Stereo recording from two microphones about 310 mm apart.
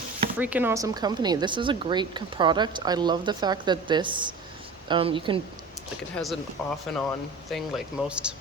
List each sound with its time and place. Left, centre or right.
0.3 s speech: centre
6.1 s speech: centre